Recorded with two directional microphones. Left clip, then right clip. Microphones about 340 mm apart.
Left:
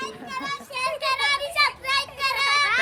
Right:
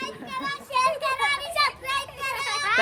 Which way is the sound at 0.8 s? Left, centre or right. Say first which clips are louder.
Even; centre.